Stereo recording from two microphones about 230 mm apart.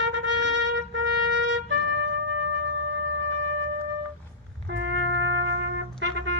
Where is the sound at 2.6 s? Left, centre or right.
Right.